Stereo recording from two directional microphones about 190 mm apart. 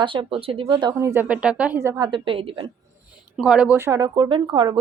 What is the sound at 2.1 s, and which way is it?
Speech, 25° right (ahead or behind).